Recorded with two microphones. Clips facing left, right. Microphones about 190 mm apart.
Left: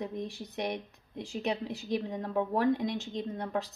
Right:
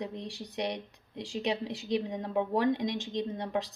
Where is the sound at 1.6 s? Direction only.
20° right (ahead or behind).